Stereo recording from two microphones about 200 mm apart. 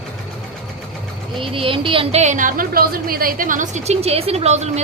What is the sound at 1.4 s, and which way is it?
A woman's voice, 25° right (ahead or behind).